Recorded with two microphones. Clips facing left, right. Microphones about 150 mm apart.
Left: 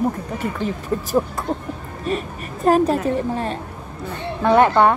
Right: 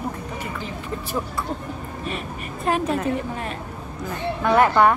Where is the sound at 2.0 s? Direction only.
40° left (ahead or behind).